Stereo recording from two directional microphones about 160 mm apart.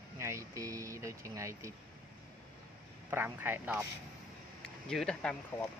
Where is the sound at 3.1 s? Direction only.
10° right (ahead or behind).